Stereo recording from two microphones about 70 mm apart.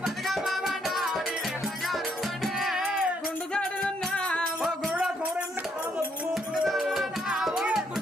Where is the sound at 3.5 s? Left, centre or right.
Centre.